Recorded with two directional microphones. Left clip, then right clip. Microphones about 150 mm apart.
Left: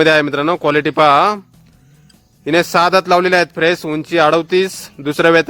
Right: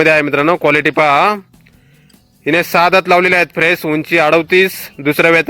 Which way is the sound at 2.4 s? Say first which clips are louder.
Right 1 dB; 10° right (ahead or behind).